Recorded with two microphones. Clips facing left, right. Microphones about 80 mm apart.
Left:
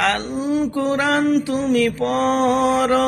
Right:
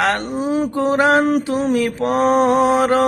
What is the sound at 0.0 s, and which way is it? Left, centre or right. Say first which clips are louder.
Mantra: right 2 dB; right.